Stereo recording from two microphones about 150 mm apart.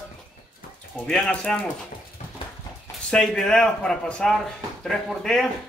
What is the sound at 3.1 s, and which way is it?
Speech, 5° left (ahead or behind).